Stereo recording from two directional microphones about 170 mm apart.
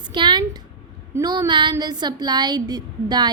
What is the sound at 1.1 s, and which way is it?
A woman's voice, 20° right (ahead or behind).